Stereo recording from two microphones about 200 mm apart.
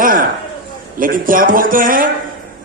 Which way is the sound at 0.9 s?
45° right (ahead or behind).